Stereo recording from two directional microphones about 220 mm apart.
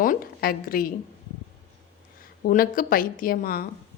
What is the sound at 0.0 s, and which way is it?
Speech, 40° left (ahead or behind).